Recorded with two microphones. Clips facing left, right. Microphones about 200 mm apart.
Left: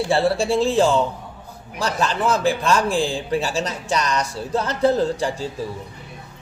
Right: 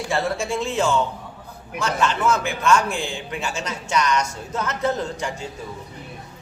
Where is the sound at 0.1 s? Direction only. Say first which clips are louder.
Left 4 dB; 30° left (ahead or behind).